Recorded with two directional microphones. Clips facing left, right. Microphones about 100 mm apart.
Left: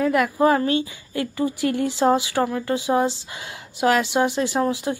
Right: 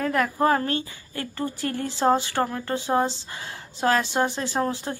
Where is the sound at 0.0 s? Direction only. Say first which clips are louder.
Left 4 dB; 15° left (ahead or behind).